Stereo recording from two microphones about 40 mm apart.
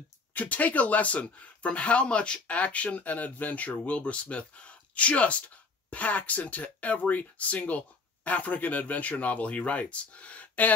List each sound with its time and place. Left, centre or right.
0.3 s speech: left